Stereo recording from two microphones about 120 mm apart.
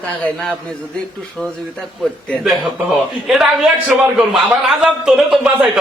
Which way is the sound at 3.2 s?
Centre (ahead or behind).